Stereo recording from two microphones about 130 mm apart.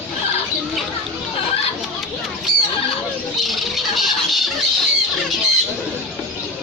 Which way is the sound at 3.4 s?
Centre (ahead or behind).